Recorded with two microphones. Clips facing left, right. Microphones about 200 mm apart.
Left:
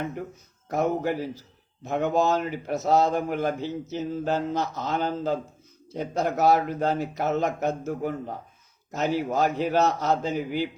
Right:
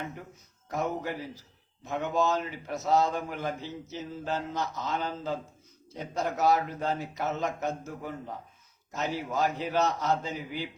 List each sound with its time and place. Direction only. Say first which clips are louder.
0.7 s a man's voice: left 7 dB; 60° left (ahead or behind)